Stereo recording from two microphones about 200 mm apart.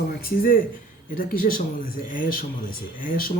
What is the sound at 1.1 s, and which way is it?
Speech, 45° left (ahead or behind).